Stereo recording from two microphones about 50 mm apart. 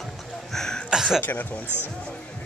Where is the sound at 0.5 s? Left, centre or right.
Centre.